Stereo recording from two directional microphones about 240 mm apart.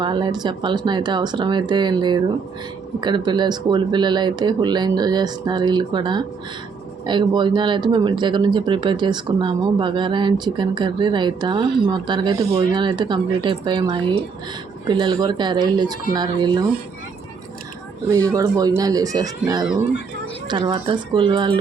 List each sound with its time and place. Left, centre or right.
0.0 s speech: centre
18.3 s speech: centre
19.4 s speech: centre
20.5 s speech: centre